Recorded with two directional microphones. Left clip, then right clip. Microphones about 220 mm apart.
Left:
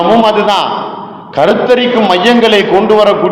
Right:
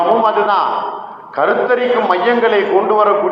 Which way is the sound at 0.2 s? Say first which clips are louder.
Left 4 dB; 60° left (ahead or behind).